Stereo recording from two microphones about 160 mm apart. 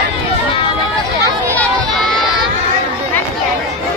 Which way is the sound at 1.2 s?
10° left (ahead or behind).